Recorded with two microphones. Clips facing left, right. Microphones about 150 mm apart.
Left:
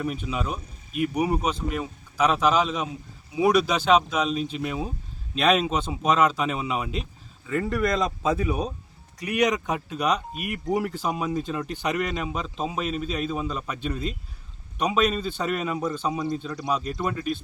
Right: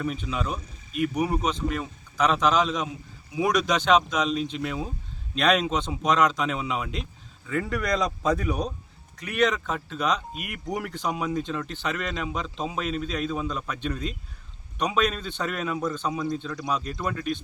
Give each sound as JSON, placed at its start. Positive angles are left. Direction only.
{"t": 0.0, "sound": "speech", "side_deg": 5}